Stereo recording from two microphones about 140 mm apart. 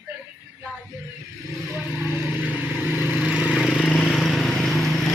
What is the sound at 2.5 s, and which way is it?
Vehicle, 15° right (ahead or behind).